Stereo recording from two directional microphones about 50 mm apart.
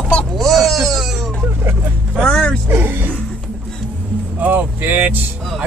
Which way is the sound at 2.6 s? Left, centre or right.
Right.